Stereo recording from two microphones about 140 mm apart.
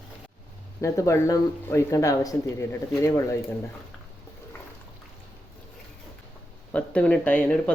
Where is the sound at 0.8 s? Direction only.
20° left (ahead or behind).